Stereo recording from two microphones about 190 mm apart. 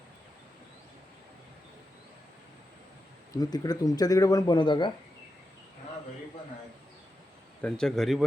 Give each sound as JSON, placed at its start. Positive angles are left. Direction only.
{"t": 3.3, "sound": "speech", "side_deg": 20}
{"t": 7.6, "sound": "speech", "side_deg": 5}